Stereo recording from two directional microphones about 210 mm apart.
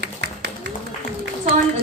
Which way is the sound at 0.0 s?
55° right (ahead or behind).